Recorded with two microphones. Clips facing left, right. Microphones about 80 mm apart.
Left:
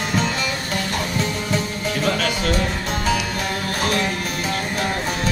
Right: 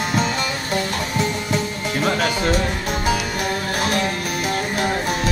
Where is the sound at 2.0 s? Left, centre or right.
Right.